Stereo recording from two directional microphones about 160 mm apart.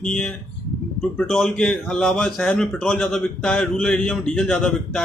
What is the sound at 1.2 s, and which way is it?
Speech, 5° left (ahead or behind).